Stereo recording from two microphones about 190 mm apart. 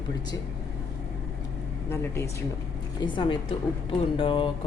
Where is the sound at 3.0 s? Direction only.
25° left (ahead or behind).